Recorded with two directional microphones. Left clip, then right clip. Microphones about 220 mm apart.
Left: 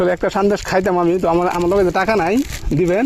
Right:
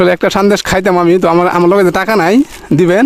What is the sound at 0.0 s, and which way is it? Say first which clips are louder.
Speech: right 6 dB; 35° right (ahead or behind).